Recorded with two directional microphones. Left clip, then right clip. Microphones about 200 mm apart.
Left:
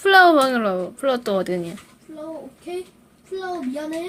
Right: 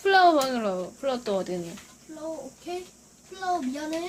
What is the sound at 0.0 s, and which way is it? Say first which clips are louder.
Speech: left 6 dB; 25° left (ahead or behind).